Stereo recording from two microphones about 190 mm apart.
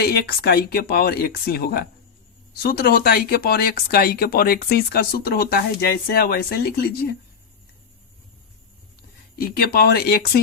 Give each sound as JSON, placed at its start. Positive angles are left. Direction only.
{"t": 0.0, "sound": "speech", "side_deg": 55}
{"t": 9.3, "sound": "speech", "side_deg": 55}